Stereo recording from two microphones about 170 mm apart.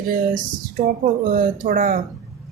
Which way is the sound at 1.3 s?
55° right (ahead or behind).